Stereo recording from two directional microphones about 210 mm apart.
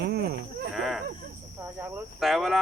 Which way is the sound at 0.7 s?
Centre (ahead or behind).